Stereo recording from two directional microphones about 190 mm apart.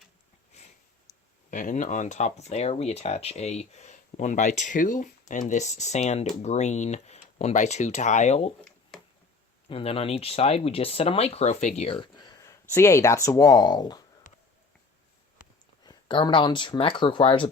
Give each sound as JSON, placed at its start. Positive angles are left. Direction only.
{"t": 1.5, "sound": "speech", "side_deg": 40}
{"t": 9.6, "sound": "speech", "side_deg": 30}
{"t": 14.3, "sound": "a sound", "side_deg": 45}
{"t": 15.8, "sound": "speech", "side_deg": 20}